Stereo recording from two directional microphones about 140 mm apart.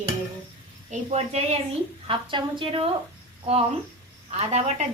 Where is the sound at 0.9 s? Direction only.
50° right (ahead or behind).